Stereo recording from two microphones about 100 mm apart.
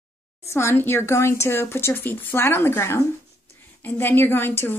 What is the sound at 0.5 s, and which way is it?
A woman's voice, 25° left (ahead or behind).